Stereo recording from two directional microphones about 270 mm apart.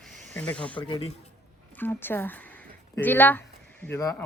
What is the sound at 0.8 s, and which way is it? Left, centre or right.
Speech, centre.